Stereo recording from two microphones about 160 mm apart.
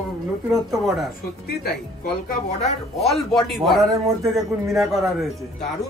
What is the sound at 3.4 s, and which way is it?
A man's voice, centre (ahead or behind).